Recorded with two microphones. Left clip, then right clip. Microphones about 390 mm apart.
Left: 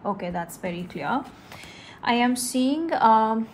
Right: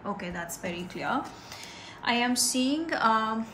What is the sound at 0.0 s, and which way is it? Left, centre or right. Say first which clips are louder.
Speech: left 6 dB; centre.